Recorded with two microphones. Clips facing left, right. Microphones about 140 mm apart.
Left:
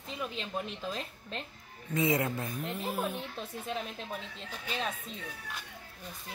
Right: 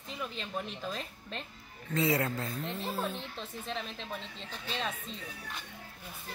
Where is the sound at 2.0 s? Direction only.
20° left (ahead or behind).